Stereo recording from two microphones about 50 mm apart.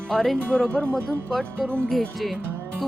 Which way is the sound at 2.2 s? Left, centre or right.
Centre.